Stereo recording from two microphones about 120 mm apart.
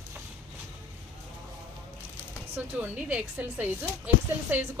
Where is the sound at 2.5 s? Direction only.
15° right (ahead or behind).